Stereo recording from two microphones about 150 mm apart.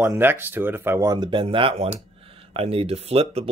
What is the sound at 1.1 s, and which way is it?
Speech, 30° right (ahead or behind).